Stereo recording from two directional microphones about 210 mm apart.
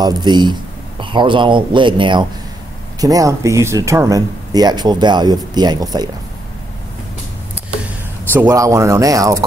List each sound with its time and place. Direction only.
0.0 s speech: 20° right (ahead or behind)
8.3 s speech: 10° right (ahead or behind)